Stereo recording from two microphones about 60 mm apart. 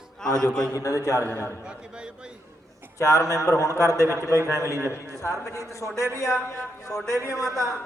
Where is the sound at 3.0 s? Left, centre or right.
Left.